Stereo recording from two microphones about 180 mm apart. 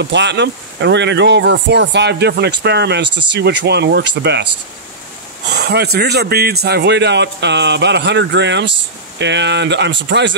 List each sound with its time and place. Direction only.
0.0 s speech: 75° right (ahead or behind)
5.5 s speech: 65° right (ahead or behind)
10.0 s speech: 90° right